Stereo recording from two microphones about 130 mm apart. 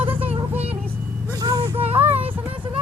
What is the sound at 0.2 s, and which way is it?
Vehicle, 45° right (ahead or behind).